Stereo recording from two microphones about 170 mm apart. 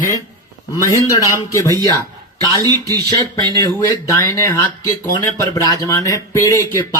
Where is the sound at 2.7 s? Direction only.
20° right (ahead or behind).